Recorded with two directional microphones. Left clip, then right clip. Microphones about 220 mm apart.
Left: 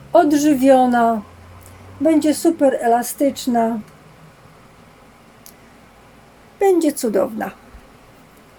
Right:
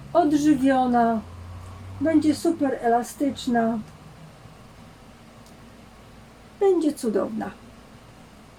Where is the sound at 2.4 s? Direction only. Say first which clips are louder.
Left 7 dB; 40° left (ahead or behind).